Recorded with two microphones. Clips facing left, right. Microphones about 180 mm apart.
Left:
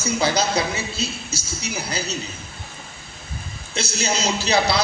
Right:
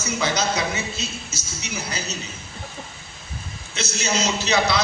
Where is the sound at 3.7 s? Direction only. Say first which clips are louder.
Left 1 dB; 35° left (ahead or behind).